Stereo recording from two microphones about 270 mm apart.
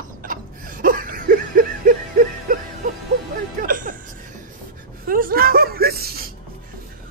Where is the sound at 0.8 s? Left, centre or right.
Right.